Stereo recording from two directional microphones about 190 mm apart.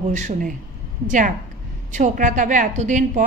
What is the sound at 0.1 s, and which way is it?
A woman's voice, 40° right (ahead or behind).